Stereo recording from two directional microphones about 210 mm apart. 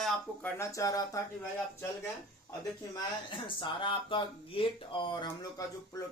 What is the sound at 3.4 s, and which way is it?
Speech, 25° left (ahead or behind).